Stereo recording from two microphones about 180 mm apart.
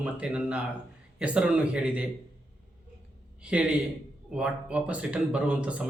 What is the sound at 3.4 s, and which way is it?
Speech, 5° right (ahead or behind).